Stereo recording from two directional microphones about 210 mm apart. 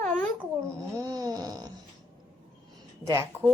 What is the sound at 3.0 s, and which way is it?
Speech, 15° right (ahead or behind).